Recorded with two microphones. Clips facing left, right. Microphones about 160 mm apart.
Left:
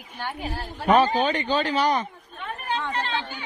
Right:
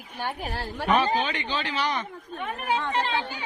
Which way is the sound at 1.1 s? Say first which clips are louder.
Left 5 dB; 40° left (ahead or behind).